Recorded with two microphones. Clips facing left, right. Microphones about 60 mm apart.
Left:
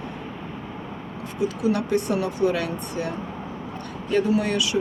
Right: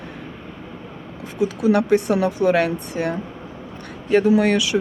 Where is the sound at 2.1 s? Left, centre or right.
Right.